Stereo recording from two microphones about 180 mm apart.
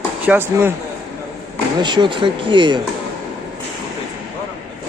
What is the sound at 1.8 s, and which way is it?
Speech, 25° right (ahead or behind).